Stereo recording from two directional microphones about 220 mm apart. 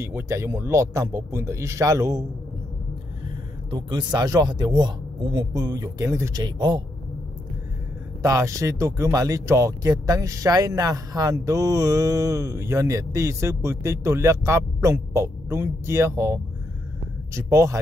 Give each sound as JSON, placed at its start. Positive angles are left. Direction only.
{"t": 0.0, "sound": "speech", "side_deg": -10}
{"t": 3.7, "sound": "speech", "side_deg": -20}
{"t": 8.2, "sound": "speech", "side_deg": -15}